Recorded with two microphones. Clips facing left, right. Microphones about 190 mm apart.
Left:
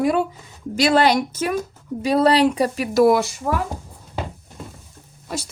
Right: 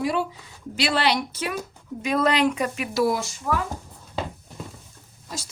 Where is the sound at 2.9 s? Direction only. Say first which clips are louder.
Left 8 dB; 65° left (ahead or behind).